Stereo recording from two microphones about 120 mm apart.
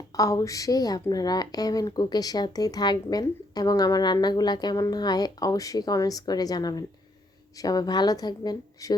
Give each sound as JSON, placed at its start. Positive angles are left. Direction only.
{"t": 0.2, "sound": "a woman's voice", "side_deg": 30}